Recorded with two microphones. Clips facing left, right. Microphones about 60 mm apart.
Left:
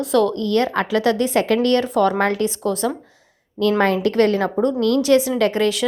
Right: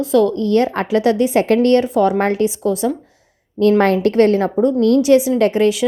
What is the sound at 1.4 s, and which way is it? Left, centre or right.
A woman's voice, right.